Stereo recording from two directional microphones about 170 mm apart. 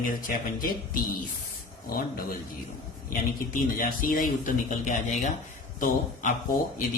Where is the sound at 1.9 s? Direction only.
60° left (ahead or behind).